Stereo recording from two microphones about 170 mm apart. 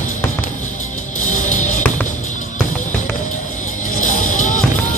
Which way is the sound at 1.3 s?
45° left (ahead or behind).